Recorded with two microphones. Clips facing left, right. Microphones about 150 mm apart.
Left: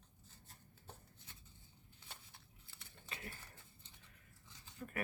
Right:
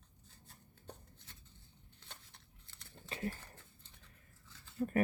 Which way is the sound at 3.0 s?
35° right (ahead or behind).